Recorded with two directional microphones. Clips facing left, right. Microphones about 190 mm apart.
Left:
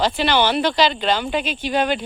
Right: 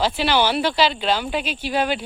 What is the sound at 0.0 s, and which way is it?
Speech, 5° right (ahead or behind).